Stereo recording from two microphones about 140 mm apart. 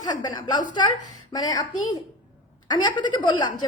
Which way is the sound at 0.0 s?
30° left (ahead or behind).